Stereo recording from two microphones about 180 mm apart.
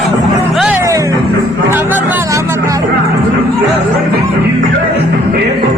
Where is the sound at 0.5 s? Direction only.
Centre (ahead or behind).